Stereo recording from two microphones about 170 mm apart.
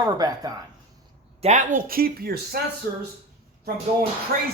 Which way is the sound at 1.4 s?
45° right (ahead or behind).